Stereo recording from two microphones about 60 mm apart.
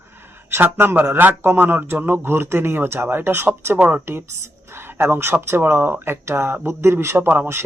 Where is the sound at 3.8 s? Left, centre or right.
Right.